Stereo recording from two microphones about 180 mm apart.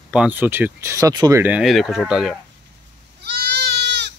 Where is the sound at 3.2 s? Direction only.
65° right (ahead or behind).